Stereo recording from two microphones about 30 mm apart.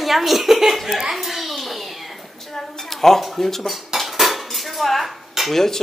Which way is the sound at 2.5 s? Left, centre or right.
Centre.